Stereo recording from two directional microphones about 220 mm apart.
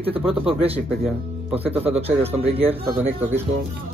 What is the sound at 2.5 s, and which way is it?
Speech, 25° right (ahead or behind).